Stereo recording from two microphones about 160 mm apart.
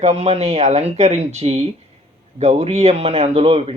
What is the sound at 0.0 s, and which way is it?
Speech, 40° right (ahead or behind).